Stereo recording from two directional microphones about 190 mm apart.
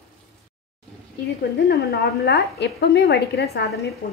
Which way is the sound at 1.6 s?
60° left (ahead or behind).